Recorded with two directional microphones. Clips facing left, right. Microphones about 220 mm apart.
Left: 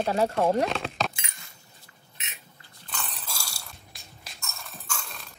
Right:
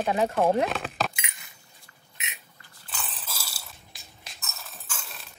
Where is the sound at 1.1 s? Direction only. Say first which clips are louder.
Right 3 dB; 20° right (ahead or behind).